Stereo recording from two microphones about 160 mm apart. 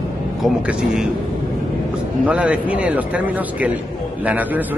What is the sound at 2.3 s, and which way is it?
Speech, 10° right (ahead or behind).